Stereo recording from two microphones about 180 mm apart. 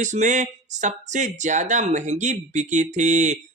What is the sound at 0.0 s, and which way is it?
Speech, 45° right (ahead or behind).